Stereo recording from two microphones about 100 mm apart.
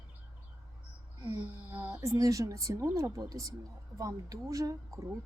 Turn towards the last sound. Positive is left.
turn(degrees=-35)  # may be behind; listen again after turning